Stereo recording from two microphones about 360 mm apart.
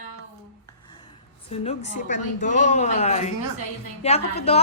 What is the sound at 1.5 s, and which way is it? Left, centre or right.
Speech, centre.